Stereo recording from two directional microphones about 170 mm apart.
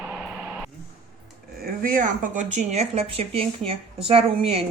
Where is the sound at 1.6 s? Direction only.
55° right (ahead or behind).